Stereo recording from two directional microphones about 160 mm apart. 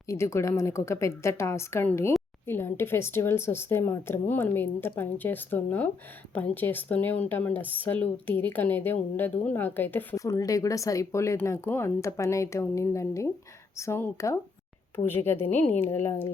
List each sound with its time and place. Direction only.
0.1 s a woman's voice: 15° left (ahead or behind)